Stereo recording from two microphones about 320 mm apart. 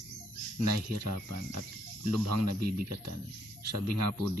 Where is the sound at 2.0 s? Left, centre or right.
Right.